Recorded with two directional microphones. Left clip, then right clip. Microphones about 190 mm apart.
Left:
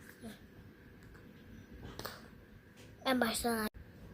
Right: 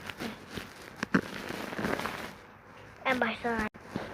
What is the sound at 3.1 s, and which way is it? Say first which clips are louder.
Speech: right 4 dB; 45° left (ahead or behind).